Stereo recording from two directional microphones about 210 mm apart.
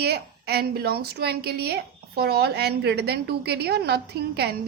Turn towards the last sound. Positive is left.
turn(degrees=-50)  # may be behind; listen again after turning